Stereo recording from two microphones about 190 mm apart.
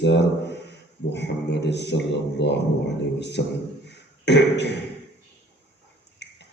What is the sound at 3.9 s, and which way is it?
Beatboxing, 65° left (ahead or behind).